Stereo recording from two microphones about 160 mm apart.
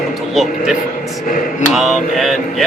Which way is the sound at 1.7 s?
Centre (ahead or behind).